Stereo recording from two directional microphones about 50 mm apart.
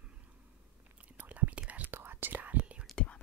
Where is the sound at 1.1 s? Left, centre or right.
Right.